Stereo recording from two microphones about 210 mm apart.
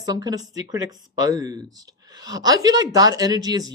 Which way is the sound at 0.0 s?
20° right (ahead or behind).